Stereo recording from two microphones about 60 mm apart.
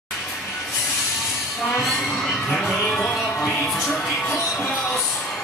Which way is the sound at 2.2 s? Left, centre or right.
Centre.